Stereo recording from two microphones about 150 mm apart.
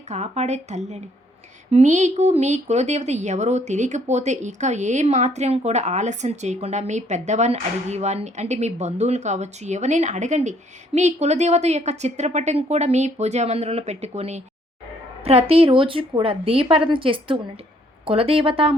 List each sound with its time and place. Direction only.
0.1 s a woman's voice: 50° right (ahead or behind)